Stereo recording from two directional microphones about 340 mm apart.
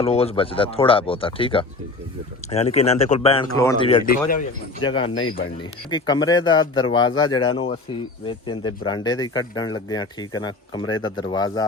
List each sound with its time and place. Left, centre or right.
0.0 s speech: centre
5.1 s speech: left
5.9 s speech: centre
10.9 s speech: left
11.2 s speech: centre